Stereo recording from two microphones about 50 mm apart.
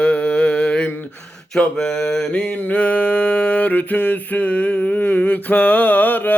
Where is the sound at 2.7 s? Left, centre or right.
Left.